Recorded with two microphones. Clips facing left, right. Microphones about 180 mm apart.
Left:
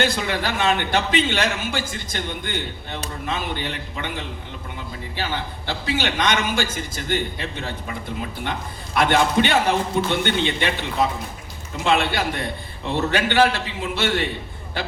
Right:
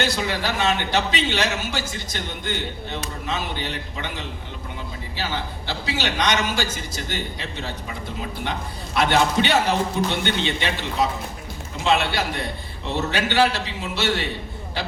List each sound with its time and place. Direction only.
0.0 s a man's voice: 50° left (ahead or behind)
9.0 s a man's voice: 50° left (ahead or behind)
11.8 s a man's voice: 50° left (ahead or behind)